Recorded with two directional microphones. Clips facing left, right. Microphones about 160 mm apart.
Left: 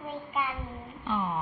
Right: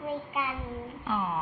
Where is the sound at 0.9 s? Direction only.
Centre (ahead or behind).